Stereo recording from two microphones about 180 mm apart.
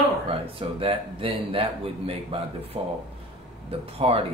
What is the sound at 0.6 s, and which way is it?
Speech, 30° right (ahead or behind).